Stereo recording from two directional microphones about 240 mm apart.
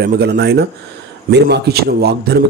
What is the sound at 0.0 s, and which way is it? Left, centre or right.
A man's voice, right.